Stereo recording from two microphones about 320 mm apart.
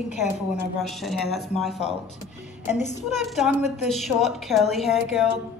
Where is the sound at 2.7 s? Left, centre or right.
Left.